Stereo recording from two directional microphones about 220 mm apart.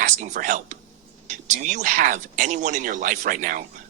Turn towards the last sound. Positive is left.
turn(degrees=-35)  # may be behind; listen again after turning